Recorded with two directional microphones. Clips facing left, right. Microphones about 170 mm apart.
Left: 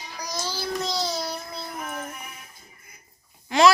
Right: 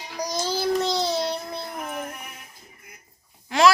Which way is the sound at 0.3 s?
30° right (ahead or behind).